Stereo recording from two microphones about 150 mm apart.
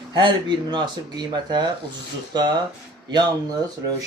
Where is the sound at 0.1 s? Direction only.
30° right (ahead or behind).